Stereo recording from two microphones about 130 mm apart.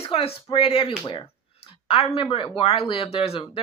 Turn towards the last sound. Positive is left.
turn(degrees=50)  # may be behind; listen again after turning